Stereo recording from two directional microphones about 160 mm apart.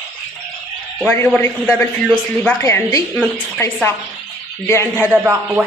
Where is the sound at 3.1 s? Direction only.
10° left (ahead or behind).